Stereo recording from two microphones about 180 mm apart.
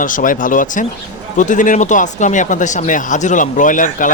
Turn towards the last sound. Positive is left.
turn(degrees=45)  # may be behind; listen again after turning